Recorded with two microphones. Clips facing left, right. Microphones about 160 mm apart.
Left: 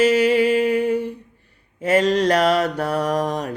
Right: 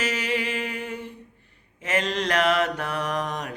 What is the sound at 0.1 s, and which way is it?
Music, 35° left (ahead or behind).